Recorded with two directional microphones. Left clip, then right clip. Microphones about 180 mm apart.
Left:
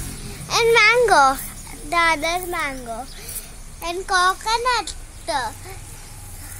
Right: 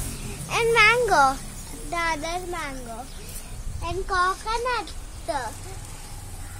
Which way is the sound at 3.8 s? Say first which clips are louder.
Left 5 dB; 55° left (ahead or behind).